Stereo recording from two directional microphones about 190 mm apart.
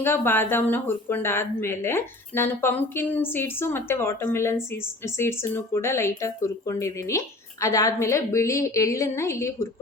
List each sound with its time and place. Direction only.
0.0 s speech: 10° left (ahead or behind)